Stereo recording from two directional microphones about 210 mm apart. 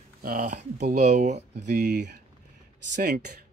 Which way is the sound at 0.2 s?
40° right (ahead or behind).